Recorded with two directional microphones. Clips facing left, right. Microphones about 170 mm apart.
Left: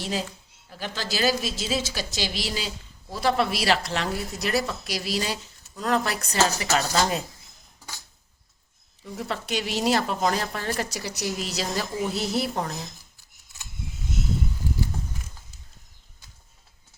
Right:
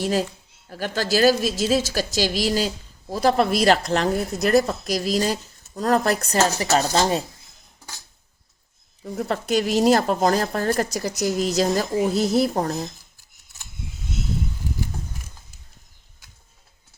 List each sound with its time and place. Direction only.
0.0 s a woman's voice: 45° right (ahead or behind); by 7.3 s 30° right (ahead or behind)
9.0 s a woman's voice: 45° right (ahead or behind)